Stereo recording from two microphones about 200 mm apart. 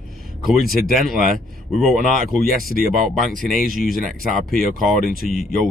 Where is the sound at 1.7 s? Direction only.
Centre (ahead or behind).